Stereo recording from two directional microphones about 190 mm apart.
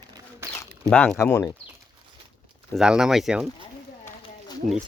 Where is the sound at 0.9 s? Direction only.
5° left (ahead or behind).